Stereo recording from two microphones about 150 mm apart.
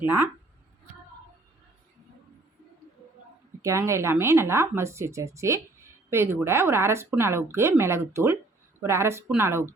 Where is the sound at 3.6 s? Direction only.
20° right (ahead or behind).